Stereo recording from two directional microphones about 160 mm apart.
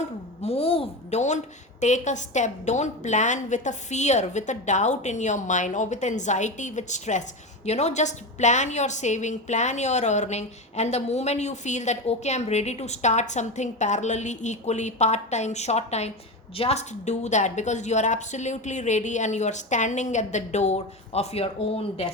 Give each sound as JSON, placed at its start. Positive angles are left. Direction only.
{"t": 0.4, "sound": "a woman's voice", "side_deg": 35}